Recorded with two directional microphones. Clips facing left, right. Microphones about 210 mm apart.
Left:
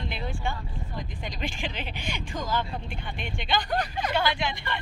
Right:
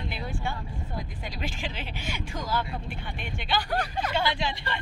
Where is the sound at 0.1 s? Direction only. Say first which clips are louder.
Left 1 dB; 5° right (ahead or behind).